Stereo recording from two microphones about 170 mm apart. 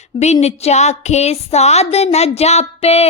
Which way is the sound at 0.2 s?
40° left (ahead or behind).